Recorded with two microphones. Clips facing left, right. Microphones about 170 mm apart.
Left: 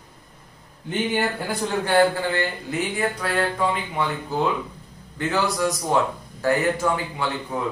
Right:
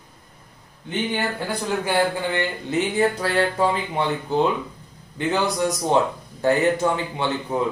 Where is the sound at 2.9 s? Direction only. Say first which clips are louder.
Right 4 dB; 30° right (ahead or behind).